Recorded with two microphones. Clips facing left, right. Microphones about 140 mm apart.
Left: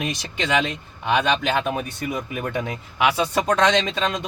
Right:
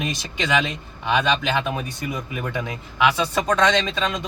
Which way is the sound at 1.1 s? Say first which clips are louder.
Left 1 dB; 10° left (ahead or behind).